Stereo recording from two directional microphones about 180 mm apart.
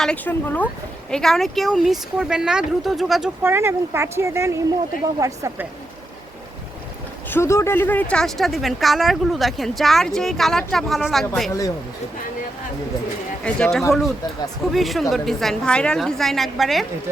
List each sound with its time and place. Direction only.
0.0 s speech: 5° left (ahead or behind)
3.4 s speech: 15° right (ahead or behind)
7.3 s speech: 15° left (ahead or behind)
13.4 s speech: 5° left (ahead or behind)